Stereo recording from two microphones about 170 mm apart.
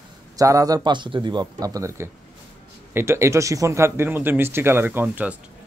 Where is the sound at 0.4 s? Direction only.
20° right (ahead or behind).